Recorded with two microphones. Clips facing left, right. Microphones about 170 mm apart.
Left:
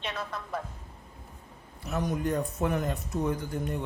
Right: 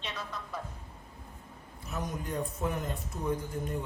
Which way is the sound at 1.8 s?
70° left (ahead or behind).